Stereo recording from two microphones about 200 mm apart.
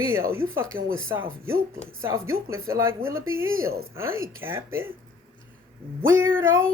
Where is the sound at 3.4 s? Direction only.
90° right.